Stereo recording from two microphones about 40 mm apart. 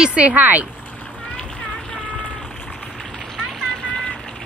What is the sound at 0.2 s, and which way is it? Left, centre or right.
Speech, right.